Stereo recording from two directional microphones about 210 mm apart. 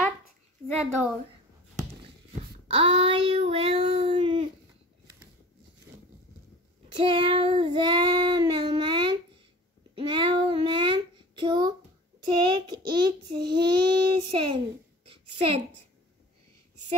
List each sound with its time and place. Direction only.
0.7 s a woman's voice: centre (ahead or behind)
2.7 s child singing: 25° right (ahead or behind)
7.0 s child singing: 25° right (ahead or behind)
15.0 s a sound: 25° right (ahead or behind)